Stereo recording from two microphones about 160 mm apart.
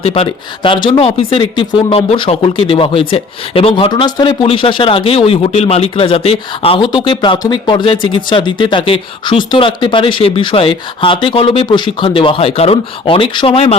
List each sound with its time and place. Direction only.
0.0 s speech: 35° left (ahead or behind)